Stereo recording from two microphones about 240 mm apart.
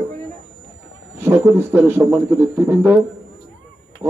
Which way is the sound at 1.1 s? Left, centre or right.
Centre.